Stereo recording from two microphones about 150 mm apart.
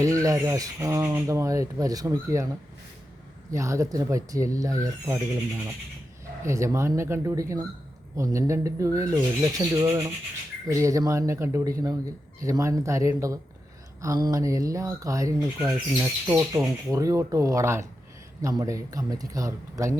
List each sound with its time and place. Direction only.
0.0 s speech: 20° right (ahead or behind)
3.5 s speech: 20° right (ahead or behind)
6.4 s speech: 20° right (ahead or behind)